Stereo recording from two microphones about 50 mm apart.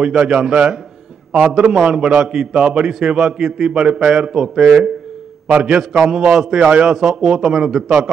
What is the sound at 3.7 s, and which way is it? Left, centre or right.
Speech, centre.